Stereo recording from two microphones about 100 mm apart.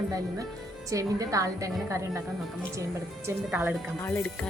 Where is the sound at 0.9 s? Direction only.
35° right (ahead or behind).